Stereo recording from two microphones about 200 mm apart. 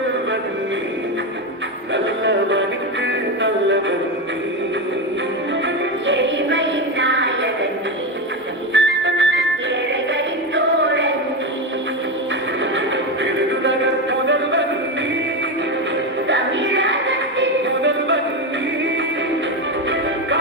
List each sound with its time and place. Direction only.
1.9 s music: 65° right (ahead or behind)
5.6 s music: 65° right (ahead or behind)
8.7 s music: 65° right (ahead or behind)
10.5 s a sound: 65° right (ahead or behind)
13.2 s music: 65° right (ahead or behind)
16.2 s music: 65° right (ahead or behind)